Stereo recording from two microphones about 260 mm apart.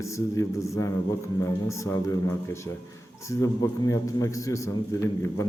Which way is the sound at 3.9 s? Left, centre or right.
Centre.